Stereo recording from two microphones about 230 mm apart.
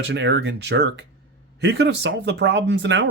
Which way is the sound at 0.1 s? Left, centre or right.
Right.